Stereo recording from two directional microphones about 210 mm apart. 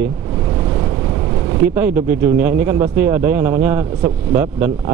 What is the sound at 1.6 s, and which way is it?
Speech, 10° right (ahead or behind).